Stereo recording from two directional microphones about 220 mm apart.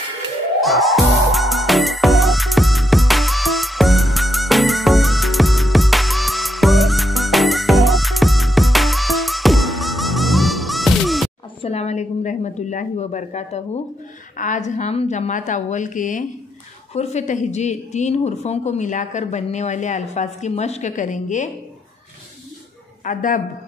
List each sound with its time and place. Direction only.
0.6 s music: centre (ahead or behind)
11.6 s a sound: 30° left (ahead or behind)
14.3 s a woman's voice: 35° left (ahead or behind)
23.0 s a woman's voice: 40° left (ahead or behind)